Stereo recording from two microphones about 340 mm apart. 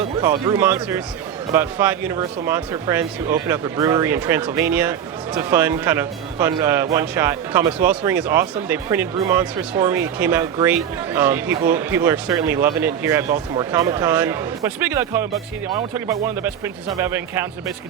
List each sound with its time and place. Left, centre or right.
0.2 s speech: centre
13.2 s speech: right
13.7 s speech: centre